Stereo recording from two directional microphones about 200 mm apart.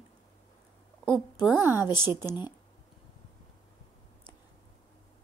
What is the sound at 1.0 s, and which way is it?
Speech, 25° left (ahead or behind).